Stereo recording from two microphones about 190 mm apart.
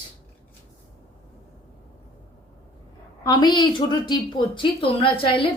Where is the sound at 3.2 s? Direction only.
20° left (ahead or behind).